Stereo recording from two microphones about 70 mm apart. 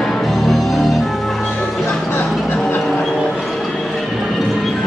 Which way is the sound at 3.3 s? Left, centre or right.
Centre.